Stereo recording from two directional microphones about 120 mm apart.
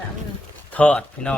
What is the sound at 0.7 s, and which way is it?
Speech, 10° left (ahead or behind).